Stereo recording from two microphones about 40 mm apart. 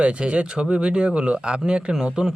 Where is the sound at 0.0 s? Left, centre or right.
Right.